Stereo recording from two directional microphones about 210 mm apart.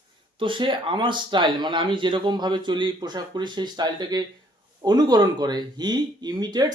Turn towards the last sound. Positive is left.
turn(degrees=-20)  # may be behind; listen again after turning